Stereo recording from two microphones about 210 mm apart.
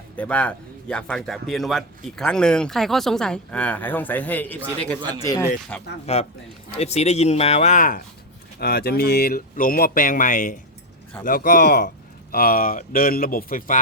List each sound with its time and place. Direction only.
0.2 s speech: 5° left (ahead or behind)
6.1 s speech: 30° left (ahead or behind)